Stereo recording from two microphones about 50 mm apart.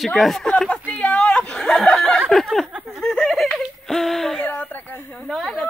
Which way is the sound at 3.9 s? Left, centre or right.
Centre.